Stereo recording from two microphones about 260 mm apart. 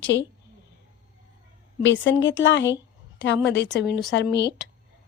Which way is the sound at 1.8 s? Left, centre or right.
Left.